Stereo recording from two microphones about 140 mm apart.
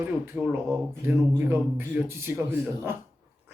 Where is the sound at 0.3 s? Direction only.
15° right (ahead or behind).